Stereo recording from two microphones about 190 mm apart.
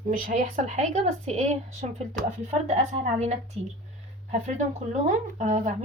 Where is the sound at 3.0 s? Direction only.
35° right (ahead or behind).